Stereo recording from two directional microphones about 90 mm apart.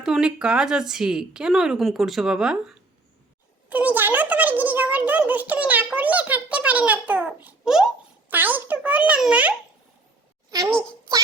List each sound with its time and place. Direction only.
0.0 s a woman's voice: 5° right (ahead or behind)
3.7 s a child's voice: 15° right (ahead or behind)
7.6 s a child's voice: 5° right (ahead or behind)
8.3 s a child's voice: 20° right (ahead or behind)
10.5 s a child's voice: 40° right (ahead or behind)